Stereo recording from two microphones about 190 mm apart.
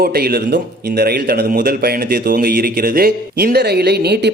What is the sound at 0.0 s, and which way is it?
Speech, 55° right (ahead or behind).